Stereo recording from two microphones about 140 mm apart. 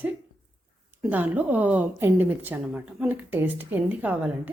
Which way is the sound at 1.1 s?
10° right (ahead or behind).